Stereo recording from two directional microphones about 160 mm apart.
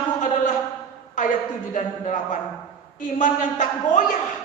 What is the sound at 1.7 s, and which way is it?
A woman's voice, 50° left (ahead or behind).